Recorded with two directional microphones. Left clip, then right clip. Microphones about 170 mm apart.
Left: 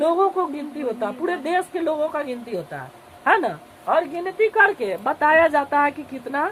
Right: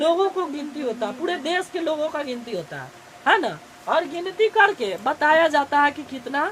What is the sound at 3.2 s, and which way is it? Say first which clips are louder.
A woman's voice: left 1 dB; 30° right (ahead or behind).